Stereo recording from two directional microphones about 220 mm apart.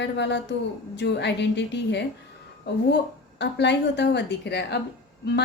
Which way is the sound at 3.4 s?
50° left (ahead or behind).